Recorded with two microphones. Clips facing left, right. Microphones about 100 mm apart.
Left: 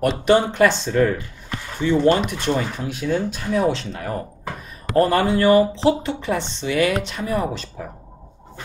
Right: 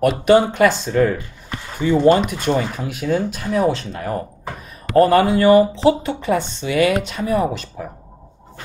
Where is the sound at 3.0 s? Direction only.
45° right (ahead or behind).